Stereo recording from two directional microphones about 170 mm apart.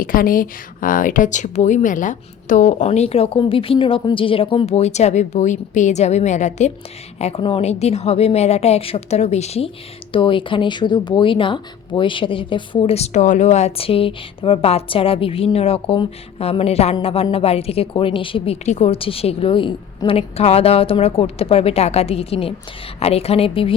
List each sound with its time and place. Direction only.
0.0 s speech: 55° left (ahead or behind); by 23.7 s 35° left (ahead or behind)